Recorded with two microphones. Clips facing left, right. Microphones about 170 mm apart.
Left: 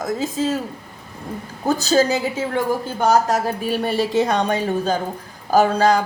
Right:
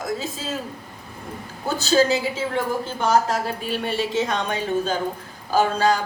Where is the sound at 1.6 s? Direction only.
40° left (ahead or behind).